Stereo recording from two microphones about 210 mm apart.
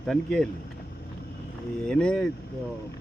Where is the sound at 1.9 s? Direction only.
5° left (ahead or behind).